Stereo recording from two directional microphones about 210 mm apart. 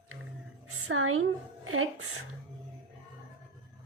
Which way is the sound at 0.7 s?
90° right.